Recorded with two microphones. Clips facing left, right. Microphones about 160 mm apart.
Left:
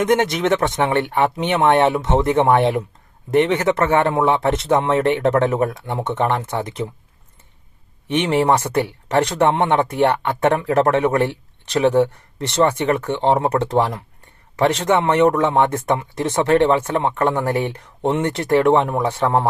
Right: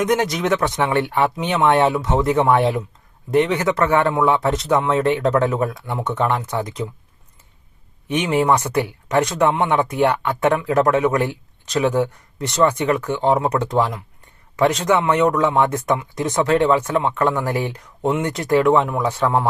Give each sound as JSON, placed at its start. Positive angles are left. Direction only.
{"t": 0.0, "sound": "a man's voice", "side_deg": 25}
{"t": 8.1, "sound": "a man's voice", "side_deg": 30}